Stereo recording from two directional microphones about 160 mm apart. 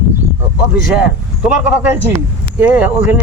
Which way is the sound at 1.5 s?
10° right (ahead or behind).